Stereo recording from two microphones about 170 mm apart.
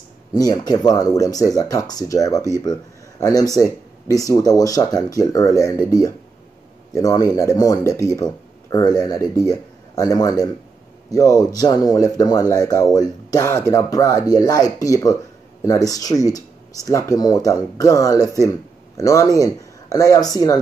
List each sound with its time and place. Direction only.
0.3 s speech: 25° left (ahead or behind)